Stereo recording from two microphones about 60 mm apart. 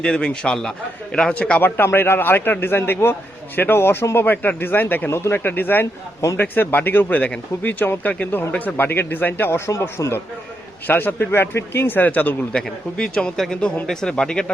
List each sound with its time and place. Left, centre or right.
0.0 s speech: centre
1.6 s a man's voice: left
9.5 s speech: left
10.8 s a man's voice: left
12.5 s speech: centre